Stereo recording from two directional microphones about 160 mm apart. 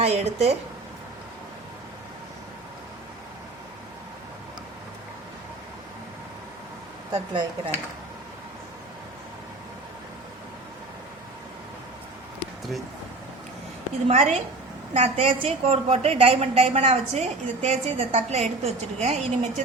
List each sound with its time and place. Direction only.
0.0 s a woman's voice: 40° right (ahead or behind)
7.1 s speech: 30° right (ahead or behind)
14.1 s a woman's voice: 45° right (ahead or behind)